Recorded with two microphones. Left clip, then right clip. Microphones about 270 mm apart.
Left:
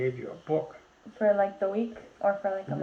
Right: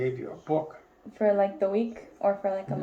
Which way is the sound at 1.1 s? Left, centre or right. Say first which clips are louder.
Right 1 dB; right.